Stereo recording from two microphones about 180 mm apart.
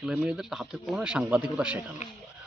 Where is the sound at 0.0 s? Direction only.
5° right (ahead or behind).